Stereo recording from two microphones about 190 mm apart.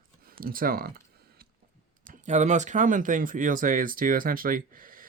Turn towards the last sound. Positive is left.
turn(degrees=-45)  # may be behind; listen again after turning